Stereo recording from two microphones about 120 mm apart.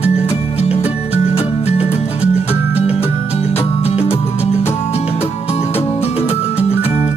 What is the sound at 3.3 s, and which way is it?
Music, 55° left (ahead or behind).